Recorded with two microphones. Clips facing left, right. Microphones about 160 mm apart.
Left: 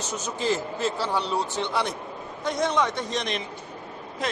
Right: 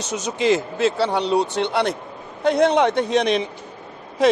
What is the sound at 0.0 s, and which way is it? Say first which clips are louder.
A man's voice: right 7 dB; 80° right.